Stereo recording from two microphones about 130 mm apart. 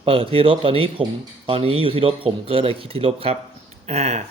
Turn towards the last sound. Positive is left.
turn(degrees=-60)  # may be behind; listen again after turning